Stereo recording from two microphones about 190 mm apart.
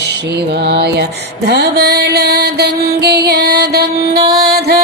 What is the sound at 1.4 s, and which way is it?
Mantra, 60° right (ahead or behind).